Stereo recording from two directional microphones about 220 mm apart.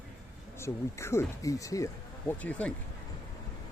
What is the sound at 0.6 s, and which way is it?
Speech, 10° left (ahead or behind).